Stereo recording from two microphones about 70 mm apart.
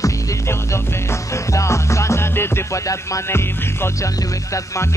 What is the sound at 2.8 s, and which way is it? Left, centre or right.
Music, left.